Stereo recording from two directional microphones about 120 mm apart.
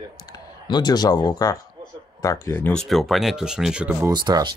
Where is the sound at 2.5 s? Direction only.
15° left (ahead or behind).